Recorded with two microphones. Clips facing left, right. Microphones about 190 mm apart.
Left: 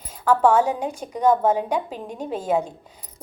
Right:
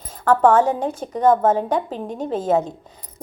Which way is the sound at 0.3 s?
10° left (ahead or behind).